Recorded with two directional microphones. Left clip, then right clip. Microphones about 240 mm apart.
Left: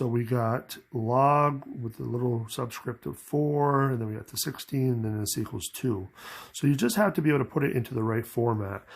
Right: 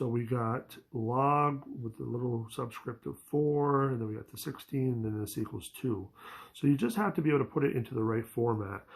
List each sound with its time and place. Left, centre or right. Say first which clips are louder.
0.0 s speech: left 5 dB; left